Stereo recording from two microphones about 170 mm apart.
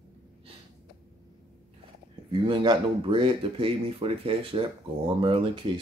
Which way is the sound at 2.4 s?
30° right (ahead or behind).